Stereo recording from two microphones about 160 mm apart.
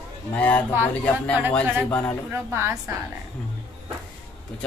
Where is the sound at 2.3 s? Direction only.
15° right (ahead or behind).